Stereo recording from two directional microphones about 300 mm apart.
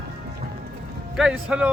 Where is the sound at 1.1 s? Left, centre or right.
Centre.